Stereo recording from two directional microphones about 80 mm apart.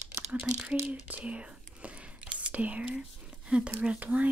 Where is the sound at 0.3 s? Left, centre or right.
Centre.